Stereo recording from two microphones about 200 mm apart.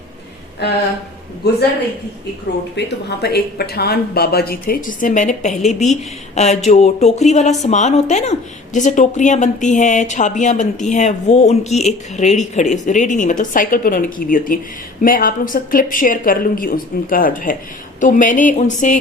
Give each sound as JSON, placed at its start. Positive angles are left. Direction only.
{"t": 1.4, "sound": "a man's voice", "side_deg": 55}
{"t": 2.7, "sound": "a woman's voice", "side_deg": 55}